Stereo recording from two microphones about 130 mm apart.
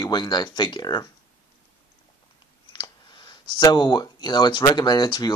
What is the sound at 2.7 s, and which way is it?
Speech, 35° left (ahead or behind).